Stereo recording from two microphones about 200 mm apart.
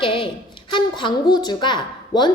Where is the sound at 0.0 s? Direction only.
25° left (ahead or behind).